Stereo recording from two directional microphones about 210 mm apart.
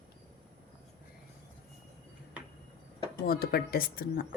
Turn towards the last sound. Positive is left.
turn(degrees=45)  # may be behind; listen again after turning